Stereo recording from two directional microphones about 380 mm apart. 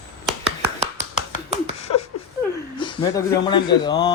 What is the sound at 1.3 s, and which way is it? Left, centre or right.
Finger snapping, centre.